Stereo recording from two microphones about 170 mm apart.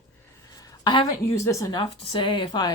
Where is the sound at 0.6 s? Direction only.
25° left (ahead or behind).